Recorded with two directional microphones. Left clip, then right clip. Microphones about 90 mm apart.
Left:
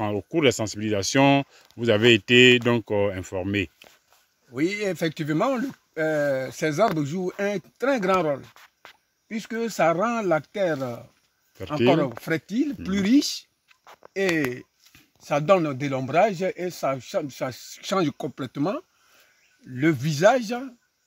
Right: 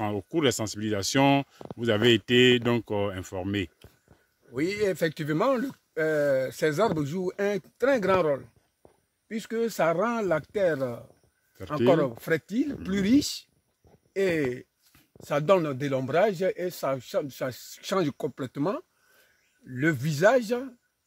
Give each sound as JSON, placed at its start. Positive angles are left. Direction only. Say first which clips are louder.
{"t": 0.0, "sound": "speech", "louder": "left 4 dB", "side_deg": -5}
{"t": 4.6, "sound": "speech", "louder": "left 1 dB", "side_deg": -25}
{"t": 12.0, "sound": "speech", "louder": "left 1 dB", "side_deg": -30}